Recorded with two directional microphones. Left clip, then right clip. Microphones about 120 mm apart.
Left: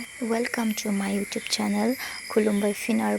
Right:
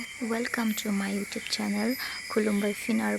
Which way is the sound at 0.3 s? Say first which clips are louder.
Left 4 dB; 20° left (ahead or behind).